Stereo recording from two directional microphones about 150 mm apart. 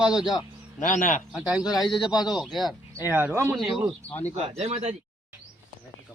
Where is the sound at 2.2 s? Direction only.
5° right (ahead or behind).